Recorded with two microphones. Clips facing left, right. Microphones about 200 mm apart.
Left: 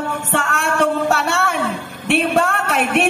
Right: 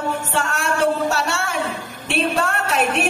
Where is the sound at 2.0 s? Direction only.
60° left (ahead or behind).